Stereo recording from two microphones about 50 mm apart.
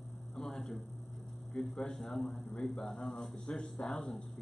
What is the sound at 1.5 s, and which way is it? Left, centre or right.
Speech, centre.